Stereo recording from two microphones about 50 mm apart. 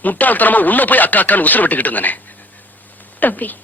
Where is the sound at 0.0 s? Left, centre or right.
Left.